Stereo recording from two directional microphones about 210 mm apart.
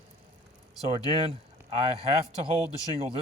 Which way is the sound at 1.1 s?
25° right (ahead or behind).